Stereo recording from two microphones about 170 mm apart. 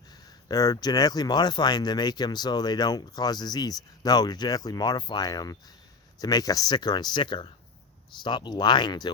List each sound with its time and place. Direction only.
0.4 s speech: 20° left (ahead or behind)